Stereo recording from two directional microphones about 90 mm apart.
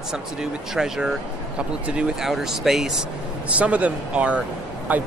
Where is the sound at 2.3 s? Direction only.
Centre (ahead or behind).